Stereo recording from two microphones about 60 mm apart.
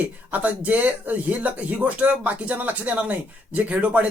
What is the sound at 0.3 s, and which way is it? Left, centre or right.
Speech, right.